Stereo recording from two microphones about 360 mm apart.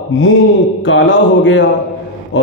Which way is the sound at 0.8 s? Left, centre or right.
Left.